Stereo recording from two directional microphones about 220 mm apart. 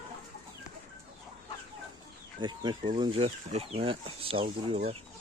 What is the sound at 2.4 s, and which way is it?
Speech, 20° right (ahead or behind).